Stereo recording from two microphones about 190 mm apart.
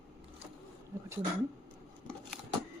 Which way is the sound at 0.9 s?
15° right (ahead or behind).